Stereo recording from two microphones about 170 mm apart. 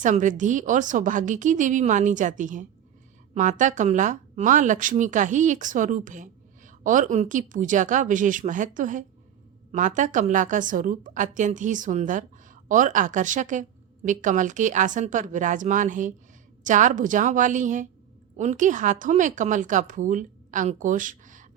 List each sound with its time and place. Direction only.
0.0 s a woman's voice: 50° right (ahead or behind)